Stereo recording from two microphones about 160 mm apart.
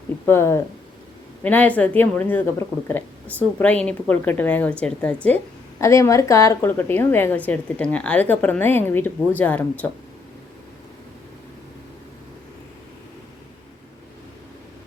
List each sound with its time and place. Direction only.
0.3 s a woman's voice: 15° left (ahead or behind)